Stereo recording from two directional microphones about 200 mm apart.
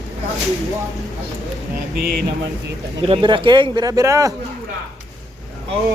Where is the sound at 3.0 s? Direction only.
25° right (ahead or behind).